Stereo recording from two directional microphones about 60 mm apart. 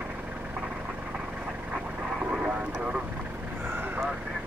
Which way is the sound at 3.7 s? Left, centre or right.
Right.